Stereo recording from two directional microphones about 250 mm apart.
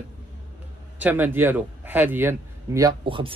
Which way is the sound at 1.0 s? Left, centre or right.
Centre.